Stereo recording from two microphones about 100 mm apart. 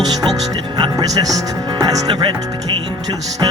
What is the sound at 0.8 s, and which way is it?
Speech, 45° right (ahead or behind).